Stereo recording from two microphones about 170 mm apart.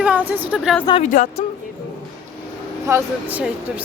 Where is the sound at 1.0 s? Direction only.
45° left (ahead or behind).